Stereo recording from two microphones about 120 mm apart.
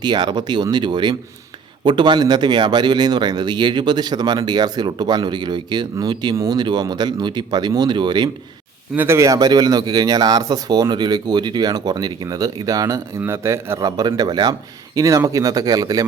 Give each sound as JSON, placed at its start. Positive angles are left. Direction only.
{"t": 0.0, "sound": "speech", "side_deg": -40}
{"t": 9.0, "sound": "speech", "side_deg": -20}